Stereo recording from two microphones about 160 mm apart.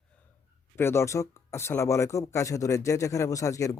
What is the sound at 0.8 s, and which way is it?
Speech, 15° left (ahead or behind).